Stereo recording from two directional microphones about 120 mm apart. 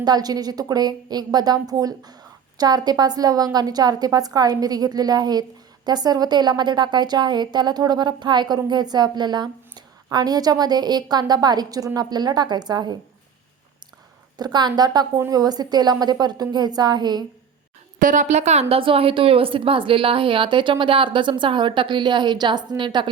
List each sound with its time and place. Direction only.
0.0 s a woman's voice: 35° right (ahead or behind)
14.3 s a woman's voice: 35° right (ahead or behind)
18.0 s speech: 90° right; by 18.6 s 70° right (ahead or behind)
18.7 s a woman's voice: 50° right (ahead or behind)